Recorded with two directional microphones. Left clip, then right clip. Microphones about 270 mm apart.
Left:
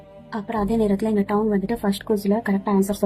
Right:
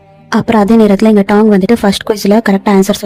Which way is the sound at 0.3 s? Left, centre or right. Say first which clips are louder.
Right 15 dB; right.